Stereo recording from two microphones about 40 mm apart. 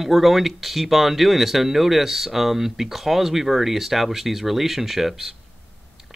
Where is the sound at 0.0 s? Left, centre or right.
Centre.